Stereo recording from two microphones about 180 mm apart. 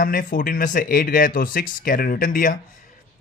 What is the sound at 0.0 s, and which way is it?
Speech, 50° left (ahead or behind).